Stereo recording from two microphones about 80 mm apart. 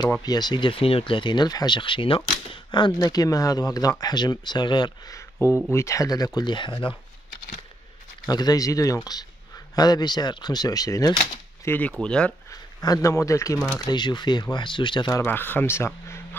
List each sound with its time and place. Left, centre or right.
0.2 s speech: left
1.8 s speech: left
2.5 s a sound: left
3.0 s speech: left
5.1 s a sound: left
5.7 s speech: left
8.3 s speech: left
11.7 s speech: left
12.0 s speech: centre
12.4 s speech: left
13.7 s speech: left
15.2 s speech: left